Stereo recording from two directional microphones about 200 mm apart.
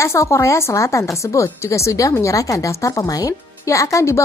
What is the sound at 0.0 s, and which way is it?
Speech, 15° left (ahead or behind).